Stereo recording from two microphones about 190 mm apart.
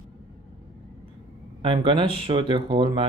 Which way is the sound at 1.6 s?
30° right (ahead or behind).